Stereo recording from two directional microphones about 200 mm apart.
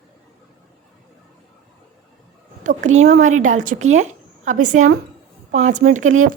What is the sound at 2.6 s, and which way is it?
A woman's voice, 35° right (ahead or behind).